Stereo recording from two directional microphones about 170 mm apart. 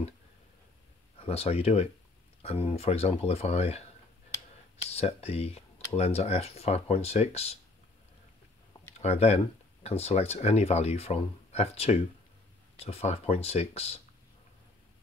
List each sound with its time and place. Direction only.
1.2 s speech: 35° left (ahead or behind)
4.8 s speech: 35° left (ahead or behind)
8.9 s speech: 40° left (ahead or behind)